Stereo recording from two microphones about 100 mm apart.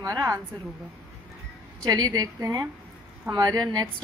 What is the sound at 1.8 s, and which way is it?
A woman's voice, 40° right (ahead or behind).